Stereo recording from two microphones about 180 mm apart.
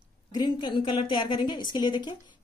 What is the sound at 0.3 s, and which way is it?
A woman's voice, 25° left (ahead or behind).